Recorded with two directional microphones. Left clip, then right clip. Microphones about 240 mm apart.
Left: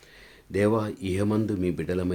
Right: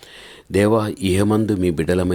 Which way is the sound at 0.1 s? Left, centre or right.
Right.